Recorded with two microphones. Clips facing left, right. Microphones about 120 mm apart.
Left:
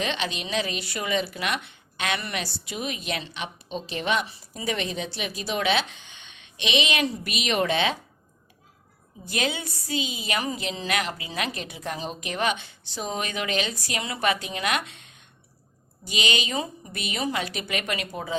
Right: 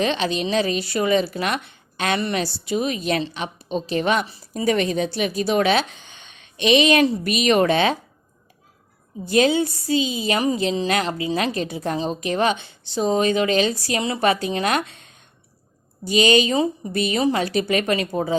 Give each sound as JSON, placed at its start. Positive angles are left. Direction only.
{"t": 0.0, "sound": "a woman's voice", "side_deg": -35}
{"t": 9.3, "sound": "a woman's voice", "side_deg": -30}